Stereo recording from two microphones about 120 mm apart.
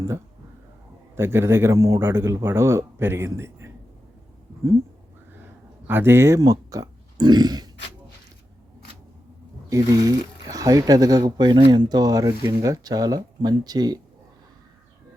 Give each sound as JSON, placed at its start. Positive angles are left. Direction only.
{"t": 1.1, "sound": "speech", "side_deg": -20}
{"t": 5.9, "sound": "speech", "side_deg": -20}
{"t": 9.6, "sound": "speech", "side_deg": -30}